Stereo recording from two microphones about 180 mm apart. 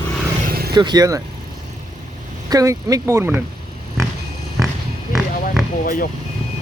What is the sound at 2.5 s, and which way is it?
Speech, 20° right (ahead or behind).